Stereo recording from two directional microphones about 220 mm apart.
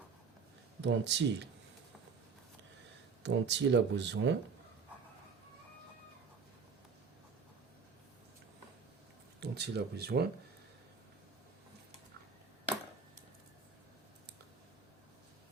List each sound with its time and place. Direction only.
0.8 s speech: 55° right (ahead or behind)
3.2 s speech: 55° right (ahead or behind)
9.4 s speech: 50° right (ahead or behind)